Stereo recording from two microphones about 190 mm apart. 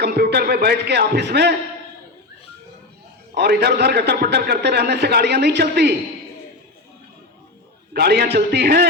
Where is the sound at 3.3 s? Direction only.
60° right (ahead or behind).